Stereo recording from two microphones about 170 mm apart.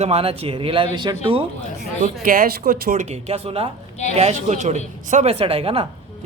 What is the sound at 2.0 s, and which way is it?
Speech, 55° right (ahead or behind).